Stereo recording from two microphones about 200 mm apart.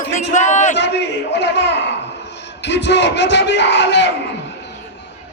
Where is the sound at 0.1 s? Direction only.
35° left (ahead or behind).